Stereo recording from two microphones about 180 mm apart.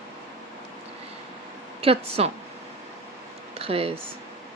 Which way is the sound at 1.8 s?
35° right (ahead or behind).